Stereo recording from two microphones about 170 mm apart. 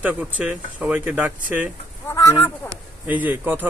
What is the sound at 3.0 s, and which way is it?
Speech, 10° right (ahead or behind).